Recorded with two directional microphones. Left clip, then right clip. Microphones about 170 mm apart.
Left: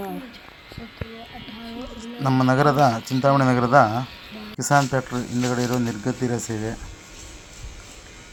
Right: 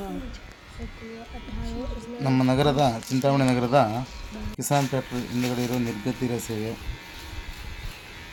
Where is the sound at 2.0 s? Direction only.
5° left (ahead or behind).